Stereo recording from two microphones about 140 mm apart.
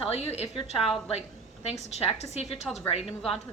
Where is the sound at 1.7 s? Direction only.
50° left (ahead or behind).